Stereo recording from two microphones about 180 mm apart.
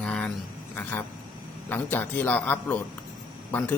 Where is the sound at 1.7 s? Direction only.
10° left (ahead or behind).